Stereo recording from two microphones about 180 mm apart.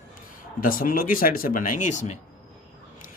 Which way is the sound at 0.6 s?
50° left (ahead or behind).